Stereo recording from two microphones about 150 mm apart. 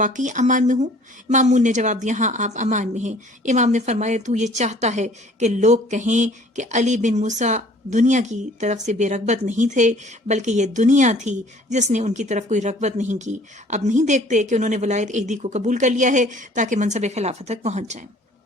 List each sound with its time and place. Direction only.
0.0 s a woman's voice: 55° right (ahead or behind)